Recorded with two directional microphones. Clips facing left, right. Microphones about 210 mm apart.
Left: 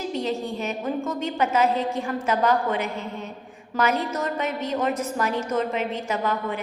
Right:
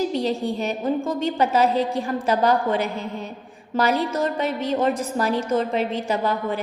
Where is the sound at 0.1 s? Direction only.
35° right (ahead or behind).